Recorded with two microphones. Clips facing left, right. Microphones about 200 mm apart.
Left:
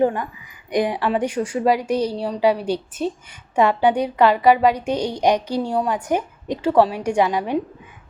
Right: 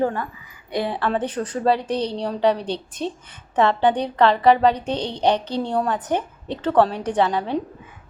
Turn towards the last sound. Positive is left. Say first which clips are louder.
# left 1 dB
turn(degrees=10)  # may be behind; listen again after turning